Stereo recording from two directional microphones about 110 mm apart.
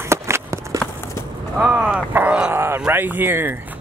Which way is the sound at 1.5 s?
10° right (ahead or behind).